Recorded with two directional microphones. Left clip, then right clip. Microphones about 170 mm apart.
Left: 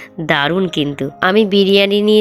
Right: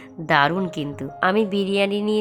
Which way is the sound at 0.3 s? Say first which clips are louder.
Left 3 dB; 20° left (ahead or behind).